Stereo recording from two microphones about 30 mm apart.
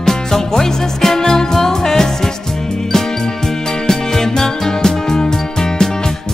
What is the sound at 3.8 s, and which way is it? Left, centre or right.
Music, centre.